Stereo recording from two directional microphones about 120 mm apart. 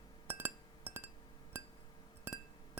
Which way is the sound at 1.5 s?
20° right (ahead or behind).